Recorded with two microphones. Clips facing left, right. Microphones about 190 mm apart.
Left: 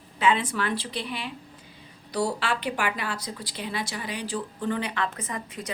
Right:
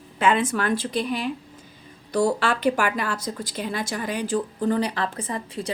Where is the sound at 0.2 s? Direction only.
50° right (ahead or behind).